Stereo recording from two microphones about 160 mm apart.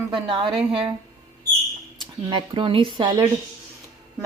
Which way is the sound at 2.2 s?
30° right (ahead or behind).